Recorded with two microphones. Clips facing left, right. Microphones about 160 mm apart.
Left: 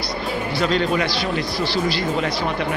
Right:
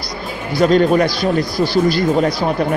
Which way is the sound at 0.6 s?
45° right (ahead or behind).